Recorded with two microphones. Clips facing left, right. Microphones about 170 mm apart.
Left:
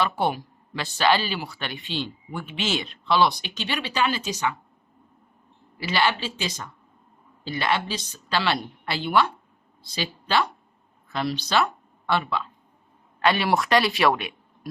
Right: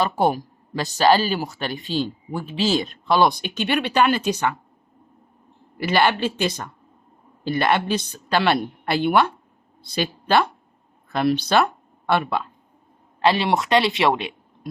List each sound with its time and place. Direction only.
0.0 s speech: 40° right (ahead or behind); by 4.5 s 55° right (ahead or behind)
5.7 s a woman's voice: 55° right (ahead or behind)
13.2 s speech: 25° right (ahead or behind)